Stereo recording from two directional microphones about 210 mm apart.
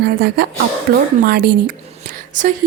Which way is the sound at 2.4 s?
40° right (ahead or behind).